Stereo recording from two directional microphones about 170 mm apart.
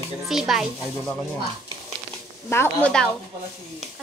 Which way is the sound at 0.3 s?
Centre (ahead or behind).